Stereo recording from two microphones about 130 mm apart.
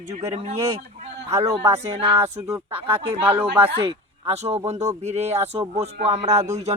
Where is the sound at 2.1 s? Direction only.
25° right (ahead or behind).